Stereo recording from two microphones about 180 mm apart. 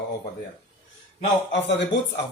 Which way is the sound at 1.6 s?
80° left.